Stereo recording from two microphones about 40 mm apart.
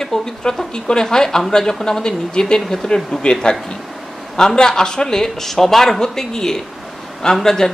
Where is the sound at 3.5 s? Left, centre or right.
Left.